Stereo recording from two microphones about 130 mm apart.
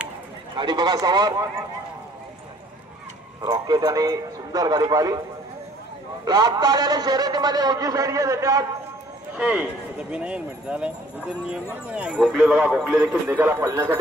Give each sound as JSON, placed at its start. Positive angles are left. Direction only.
{"t": 0.6, "sound": "speech", "side_deg": -35}
{"t": 3.4, "sound": "a man's voice", "side_deg": -35}
{"t": 6.2, "sound": "a man's voice", "side_deg": -30}
{"t": 9.4, "sound": "speech", "side_deg": -10}
{"t": 11.9, "sound": "speech", "side_deg": -5}
{"t": 13.1, "sound": "a man's voice", "side_deg": -20}